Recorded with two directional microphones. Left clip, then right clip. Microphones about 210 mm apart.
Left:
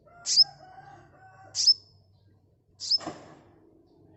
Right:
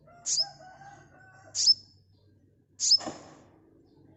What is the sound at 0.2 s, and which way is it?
Chicken, 20° left (ahead or behind).